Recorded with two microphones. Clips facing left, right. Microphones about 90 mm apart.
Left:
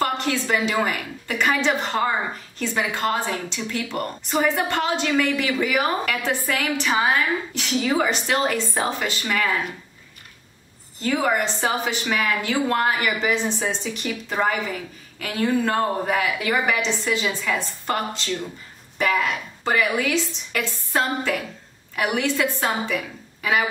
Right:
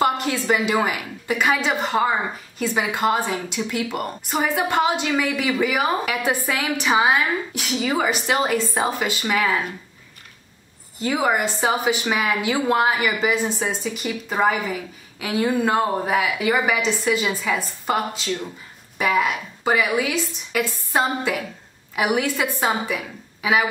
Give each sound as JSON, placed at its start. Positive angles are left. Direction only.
{"t": 0.0, "sound": "a woman's voice", "side_deg": -10}
{"t": 11.0, "sound": "a woman's voice", "side_deg": -10}